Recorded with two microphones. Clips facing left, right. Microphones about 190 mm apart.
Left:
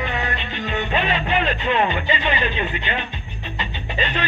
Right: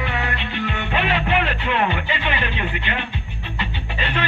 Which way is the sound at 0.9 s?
65° right (ahead or behind).